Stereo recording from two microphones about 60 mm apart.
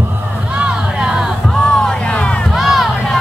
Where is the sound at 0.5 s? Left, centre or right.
Centre.